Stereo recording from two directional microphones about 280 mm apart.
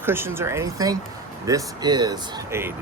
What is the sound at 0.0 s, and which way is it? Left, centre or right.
Speech, centre.